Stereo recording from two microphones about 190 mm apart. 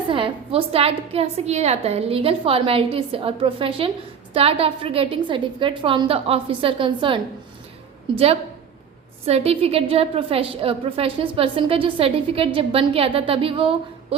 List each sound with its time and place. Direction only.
0.1 s a woman's voice: 30° right (ahead or behind)